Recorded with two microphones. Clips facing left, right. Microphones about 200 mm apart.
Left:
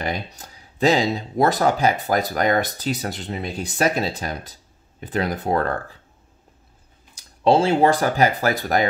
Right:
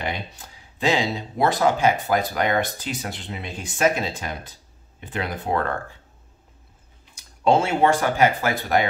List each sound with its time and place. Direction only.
0.0 s speech: 40° left (ahead or behind)
7.2 s speech: 30° left (ahead or behind)